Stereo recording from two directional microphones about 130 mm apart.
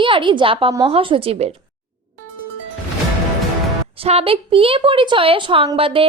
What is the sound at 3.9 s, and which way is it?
A woman's voice, 45° right (ahead or behind).